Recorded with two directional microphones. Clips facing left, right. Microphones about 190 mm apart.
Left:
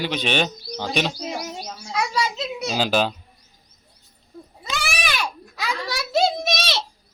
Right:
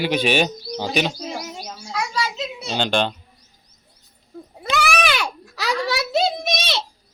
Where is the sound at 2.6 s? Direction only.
5° left (ahead or behind).